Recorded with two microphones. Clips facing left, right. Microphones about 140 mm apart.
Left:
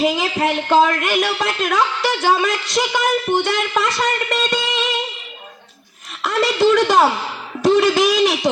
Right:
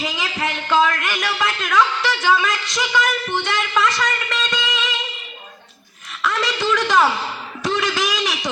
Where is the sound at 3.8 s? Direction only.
55° left (ahead or behind).